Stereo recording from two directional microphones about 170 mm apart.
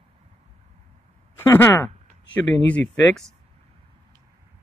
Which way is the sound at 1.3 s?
15° left (ahead or behind).